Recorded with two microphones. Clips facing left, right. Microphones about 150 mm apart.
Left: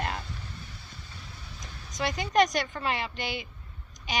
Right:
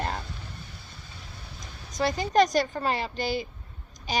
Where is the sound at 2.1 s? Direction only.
35° right (ahead or behind).